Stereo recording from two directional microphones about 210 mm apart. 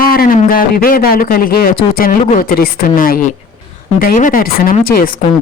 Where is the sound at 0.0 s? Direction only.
45° left (ahead or behind).